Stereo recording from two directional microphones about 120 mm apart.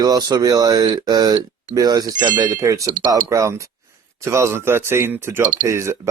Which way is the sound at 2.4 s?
25° right (ahead or behind).